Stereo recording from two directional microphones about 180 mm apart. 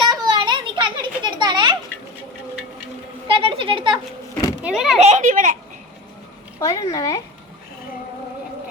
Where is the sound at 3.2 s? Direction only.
30° right (ahead or behind).